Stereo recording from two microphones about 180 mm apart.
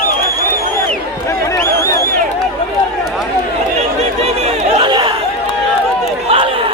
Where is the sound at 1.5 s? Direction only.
15° left (ahead or behind).